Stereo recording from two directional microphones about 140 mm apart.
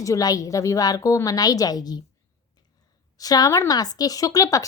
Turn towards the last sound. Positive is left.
turn(degrees=25)  # may be behind; listen again after turning